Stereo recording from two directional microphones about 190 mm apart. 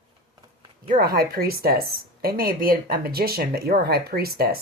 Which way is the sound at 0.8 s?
50° right (ahead or behind).